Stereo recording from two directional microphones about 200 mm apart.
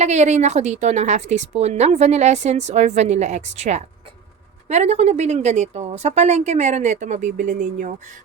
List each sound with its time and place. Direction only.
0.0 s a woman's voice: 35° right (ahead or behind)